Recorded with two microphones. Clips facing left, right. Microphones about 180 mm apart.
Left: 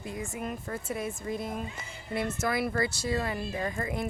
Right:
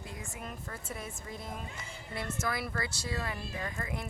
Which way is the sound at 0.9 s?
65° left (ahead or behind).